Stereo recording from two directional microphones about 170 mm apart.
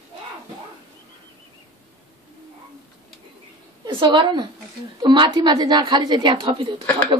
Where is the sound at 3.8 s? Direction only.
30° right (ahead or behind).